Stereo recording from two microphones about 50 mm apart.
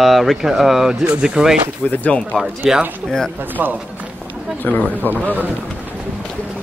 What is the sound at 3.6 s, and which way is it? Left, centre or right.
Speech, right.